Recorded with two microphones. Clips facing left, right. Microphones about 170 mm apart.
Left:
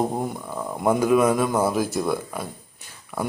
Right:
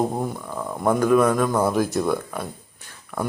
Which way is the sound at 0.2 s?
10° left (ahead or behind).